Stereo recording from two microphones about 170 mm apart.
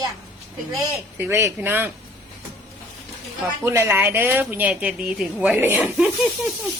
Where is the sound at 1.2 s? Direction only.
15° right (ahead or behind).